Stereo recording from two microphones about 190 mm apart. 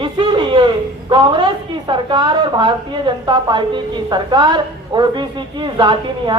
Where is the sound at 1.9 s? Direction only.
25° right (ahead or behind).